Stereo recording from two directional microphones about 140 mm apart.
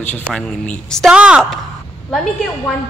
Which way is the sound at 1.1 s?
5° right (ahead or behind).